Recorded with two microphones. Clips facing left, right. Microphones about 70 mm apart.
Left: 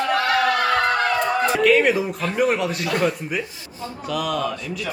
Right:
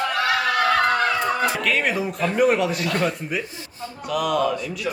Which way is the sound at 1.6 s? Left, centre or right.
Centre.